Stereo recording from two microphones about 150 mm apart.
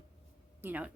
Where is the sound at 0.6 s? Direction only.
10° right (ahead or behind).